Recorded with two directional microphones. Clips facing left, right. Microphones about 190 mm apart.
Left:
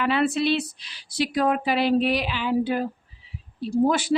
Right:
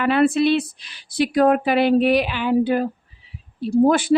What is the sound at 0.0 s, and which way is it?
Speech, 55° right (ahead or behind).